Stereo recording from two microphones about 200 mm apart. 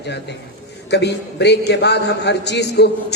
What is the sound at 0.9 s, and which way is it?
A man's voice, 60° left (ahead or behind).